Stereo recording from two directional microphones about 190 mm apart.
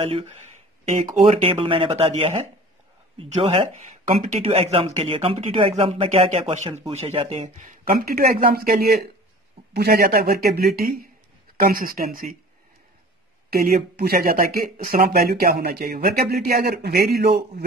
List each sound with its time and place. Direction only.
1.1 s speech: 35° right (ahead or behind)
4.4 s speech: 30° right (ahead or behind); by 12.4 s 50° right (ahead or behind)
13.5 s speech: 55° right (ahead or behind)